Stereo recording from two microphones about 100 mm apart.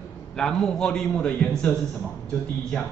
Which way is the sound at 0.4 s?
5° left (ahead or behind).